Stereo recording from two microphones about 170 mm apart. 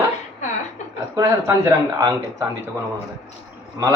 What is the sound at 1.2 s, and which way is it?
Speech, 15° right (ahead or behind).